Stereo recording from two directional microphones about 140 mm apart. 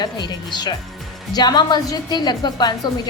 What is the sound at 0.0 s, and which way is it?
A woman's voice, 30° left (ahead or behind).